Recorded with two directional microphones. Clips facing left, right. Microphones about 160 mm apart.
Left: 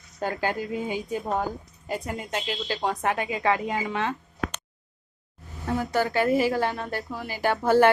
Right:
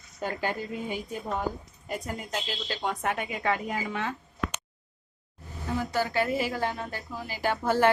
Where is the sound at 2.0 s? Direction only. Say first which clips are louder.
Left 3 dB; 85° left.